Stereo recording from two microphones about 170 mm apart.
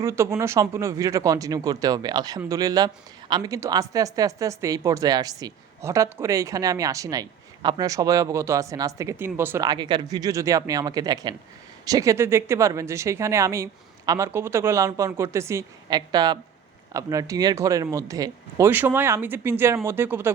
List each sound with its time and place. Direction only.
0.0 s a woman's voice: 15° right (ahead or behind)
9.6 s a woman's voice: 25° right (ahead or behind)